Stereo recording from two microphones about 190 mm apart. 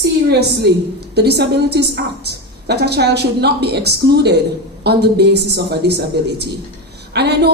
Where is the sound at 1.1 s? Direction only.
60° right (ahead or behind).